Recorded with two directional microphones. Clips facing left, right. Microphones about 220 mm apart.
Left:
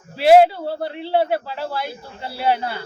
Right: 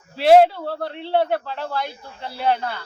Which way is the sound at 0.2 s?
5° left (ahead or behind).